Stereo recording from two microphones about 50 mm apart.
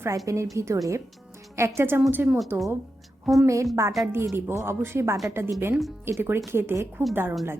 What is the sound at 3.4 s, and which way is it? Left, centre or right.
Speech, right.